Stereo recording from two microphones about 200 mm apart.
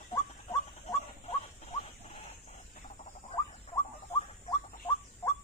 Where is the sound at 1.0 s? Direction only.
30° left (ahead or behind).